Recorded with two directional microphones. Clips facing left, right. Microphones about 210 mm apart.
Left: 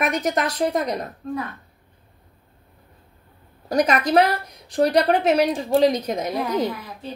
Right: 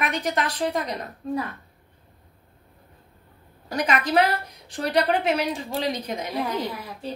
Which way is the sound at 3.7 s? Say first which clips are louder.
Left 5 dB; 40° left (ahead or behind).